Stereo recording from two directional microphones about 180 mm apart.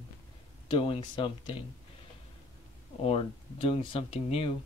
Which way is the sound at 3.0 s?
35° left (ahead or behind).